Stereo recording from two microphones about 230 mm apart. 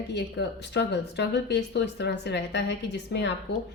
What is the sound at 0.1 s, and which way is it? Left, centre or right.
A woman's voice, left.